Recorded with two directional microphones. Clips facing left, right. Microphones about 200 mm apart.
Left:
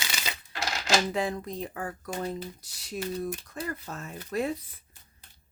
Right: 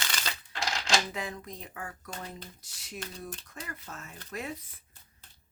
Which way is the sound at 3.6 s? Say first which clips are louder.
Left 9 dB; 35° left (ahead or behind).